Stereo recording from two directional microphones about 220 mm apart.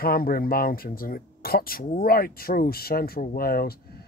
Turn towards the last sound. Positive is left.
turn(degrees=45)  # may be behind; listen again after turning